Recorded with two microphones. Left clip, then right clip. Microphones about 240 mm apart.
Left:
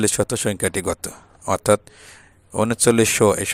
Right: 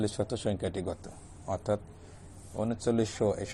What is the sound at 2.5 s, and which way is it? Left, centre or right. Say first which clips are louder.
Speech: left 13 dB; left.